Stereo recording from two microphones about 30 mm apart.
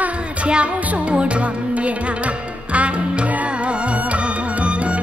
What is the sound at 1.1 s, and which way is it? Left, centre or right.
Music, right.